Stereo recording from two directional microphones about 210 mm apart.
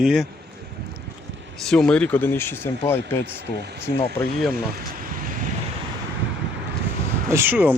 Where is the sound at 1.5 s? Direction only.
Centre (ahead or behind).